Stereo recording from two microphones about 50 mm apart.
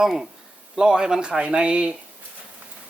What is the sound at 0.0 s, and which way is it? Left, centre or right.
Speech, centre.